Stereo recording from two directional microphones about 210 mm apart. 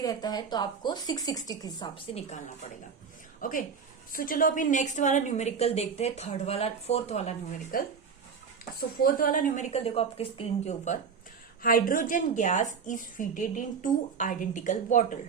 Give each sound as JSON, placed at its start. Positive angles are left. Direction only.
{"t": 0.0, "sound": "speech", "side_deg": 20}
{"t": 3.4, "sound": "a woman's voice", "side_deg": 40}
{"t": 9.0, "sound": "a woman's voice", "side_deg": 40}
{"t": 11.6, "sound": "a woman's voice", "side_deg": 40}